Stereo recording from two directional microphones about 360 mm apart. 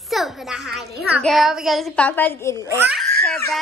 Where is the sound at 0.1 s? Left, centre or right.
Centre.